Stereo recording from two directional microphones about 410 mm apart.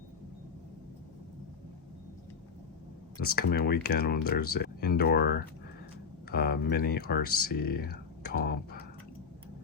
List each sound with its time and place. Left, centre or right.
3.2 s speech: left
6.3 s speech: left